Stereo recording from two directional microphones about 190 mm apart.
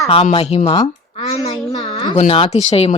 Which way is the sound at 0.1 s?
30° left (ahead or behind).